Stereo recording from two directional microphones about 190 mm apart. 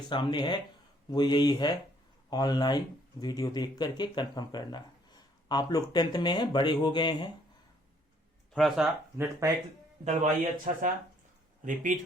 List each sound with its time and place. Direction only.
0.1 s speech: 25° left (ahead or behind)
8.5 s speech: centre (ahead or behind)
9.1 s speech: 15° right (ahead or behind)
10.0 s speech: 40° right (ahead or behind)